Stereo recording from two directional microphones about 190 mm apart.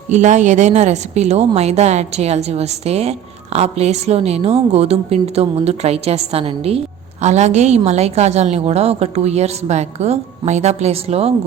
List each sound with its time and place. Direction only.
0.1 s a woman's voice: 40° right (ahead or behind)